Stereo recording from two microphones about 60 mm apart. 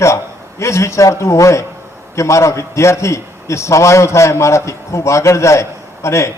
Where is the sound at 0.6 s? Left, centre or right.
Left.